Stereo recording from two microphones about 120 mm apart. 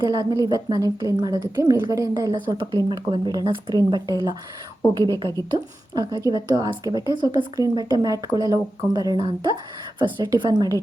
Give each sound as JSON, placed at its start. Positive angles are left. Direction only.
{"t": 0.0, "sound": "a woman's voice", "side_deg": -35}
{"t": 5.4, "sound": "a woman's voice", "side_deg": -30}